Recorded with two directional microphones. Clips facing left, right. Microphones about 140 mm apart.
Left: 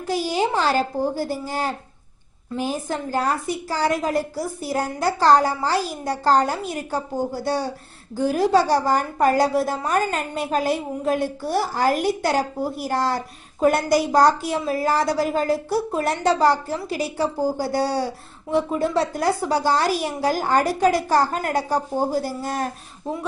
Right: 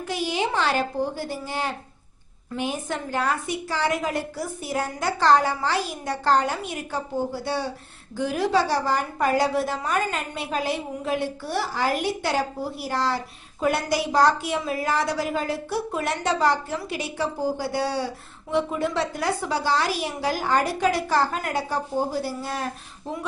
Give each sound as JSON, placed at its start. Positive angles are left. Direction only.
{"t": 0.1, "sound": "a woman's voice", "side_deg": 40}